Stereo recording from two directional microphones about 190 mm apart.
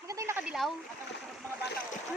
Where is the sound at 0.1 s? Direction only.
15° right (ahead or behind).